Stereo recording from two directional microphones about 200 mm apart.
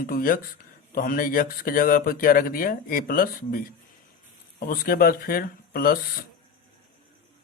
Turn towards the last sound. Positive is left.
turn(degrees=50)  # may be behind; listen again after turning